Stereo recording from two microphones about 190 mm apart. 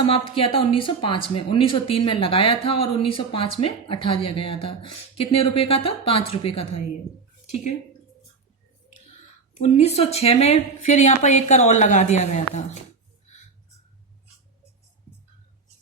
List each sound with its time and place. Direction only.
0.1 s speech: 30° left (ahead or behind)
9.6 s a woman's voice: 35° left (ahead or behind)